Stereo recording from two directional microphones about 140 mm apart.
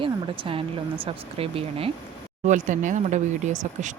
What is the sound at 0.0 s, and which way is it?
Speech, 40° right (ahead or behind).